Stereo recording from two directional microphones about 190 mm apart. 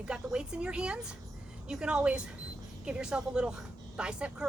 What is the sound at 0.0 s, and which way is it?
A woman's voice, 5° right (ahead or behind).